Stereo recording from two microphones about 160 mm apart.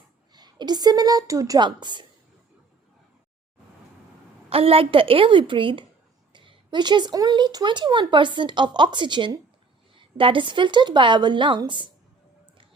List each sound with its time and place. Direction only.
0.3 s a woman's voice: 25° right (ahead or behind)
4.4 s a woman's voice: 35° right (ahead or behind)